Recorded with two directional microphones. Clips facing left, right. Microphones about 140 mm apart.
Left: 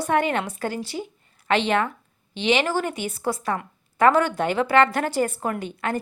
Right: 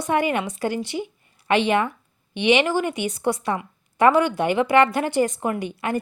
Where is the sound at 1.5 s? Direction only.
10° right (ahead or behind).